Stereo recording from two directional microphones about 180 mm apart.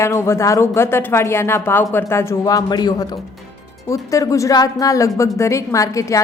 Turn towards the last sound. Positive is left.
turn(degrees=15)  # may be behind; listen again after turning